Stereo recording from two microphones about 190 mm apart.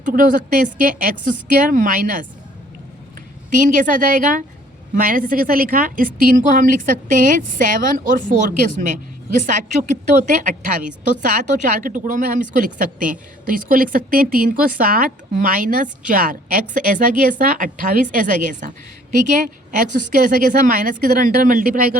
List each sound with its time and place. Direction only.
0.0 s a woman's voice: 45° right (ahead or behind)
3.5 s a woman's voice: 45° right (ahead or behind)